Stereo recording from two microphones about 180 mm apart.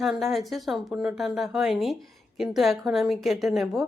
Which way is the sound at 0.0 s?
Centre (ahead or behind).